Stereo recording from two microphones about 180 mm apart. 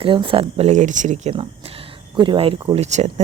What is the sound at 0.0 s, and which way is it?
Speech, 30° right (ahead or behind).